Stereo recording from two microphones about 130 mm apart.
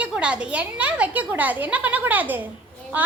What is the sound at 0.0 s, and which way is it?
A woman's voice, 10° right (ahead or behind).